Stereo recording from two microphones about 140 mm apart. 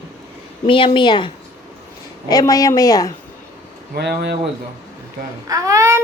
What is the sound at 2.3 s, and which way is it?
Speech, 25° left (ahead or behind).